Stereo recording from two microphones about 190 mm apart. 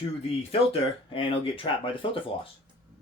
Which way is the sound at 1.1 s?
30° left (ahead or behind).